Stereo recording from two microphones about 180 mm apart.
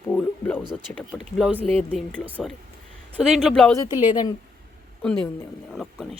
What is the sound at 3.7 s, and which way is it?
Speech, 20° left (ahead or behind).